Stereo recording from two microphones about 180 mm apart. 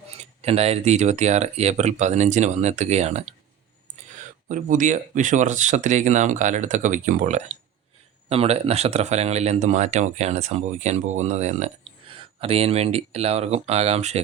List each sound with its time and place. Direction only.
0.4 s speech: 35° right (ahead or behind)